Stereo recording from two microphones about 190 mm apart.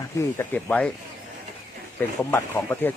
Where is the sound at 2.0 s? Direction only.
10° left (ahead or behind).